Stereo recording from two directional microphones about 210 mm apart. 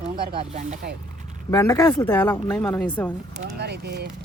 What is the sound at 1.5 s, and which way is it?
Speech, 15° left (ahead or behind).